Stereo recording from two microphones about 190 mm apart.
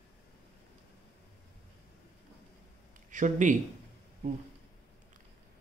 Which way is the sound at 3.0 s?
40° right (ahead or behind).